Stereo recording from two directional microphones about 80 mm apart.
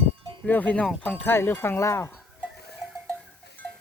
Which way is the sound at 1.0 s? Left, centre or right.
Left.